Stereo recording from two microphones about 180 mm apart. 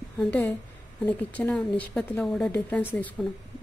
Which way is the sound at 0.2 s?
10° left (ahead or behind).